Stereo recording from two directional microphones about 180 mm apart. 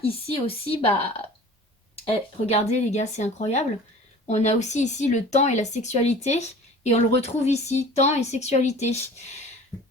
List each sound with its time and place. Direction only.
0.0 s speech: 30° left (ahead or behind)
2.5 s speech: 35° left (ahead or behind)